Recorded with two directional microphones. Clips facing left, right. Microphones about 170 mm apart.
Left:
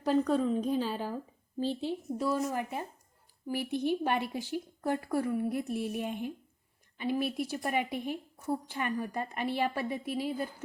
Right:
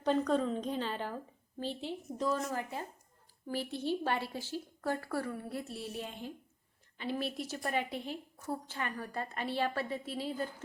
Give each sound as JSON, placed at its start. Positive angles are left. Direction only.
{"t": 0.0, "sound": "a woman's voice", "side_deg": 5}